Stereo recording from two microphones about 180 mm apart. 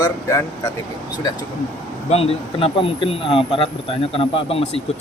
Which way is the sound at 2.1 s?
35° left (ahead or behind).